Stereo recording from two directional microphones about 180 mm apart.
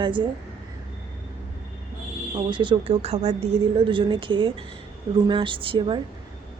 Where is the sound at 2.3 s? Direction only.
25° right (ahead or behind).